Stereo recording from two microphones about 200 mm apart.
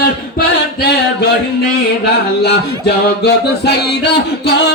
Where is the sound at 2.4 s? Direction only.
55° left (ahead or behind).